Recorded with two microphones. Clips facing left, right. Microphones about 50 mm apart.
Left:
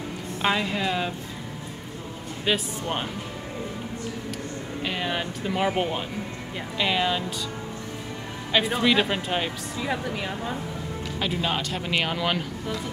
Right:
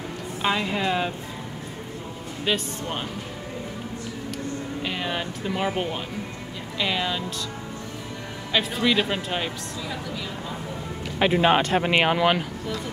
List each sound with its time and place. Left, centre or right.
0.4 s a woman's voice: centre
0.7 s speech: centre
4.8 s speech: centre
8.8 s speech: centre
9.8 s speech: left
11.1 s speech: right; by 12.4 s centre